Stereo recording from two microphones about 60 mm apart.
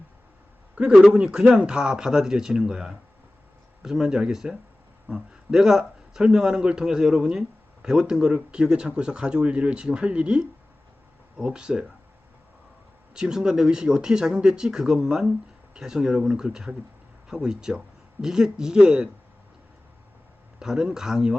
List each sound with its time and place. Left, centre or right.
0.8 s a man's voice: right
13.1 s speech: centre
20.6 s speech: centre